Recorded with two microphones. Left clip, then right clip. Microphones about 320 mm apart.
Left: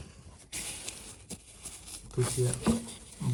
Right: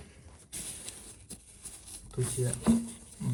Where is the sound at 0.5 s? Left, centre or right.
Centre.